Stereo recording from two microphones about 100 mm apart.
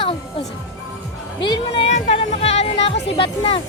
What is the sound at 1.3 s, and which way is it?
Music, 50° left (ahead or behind).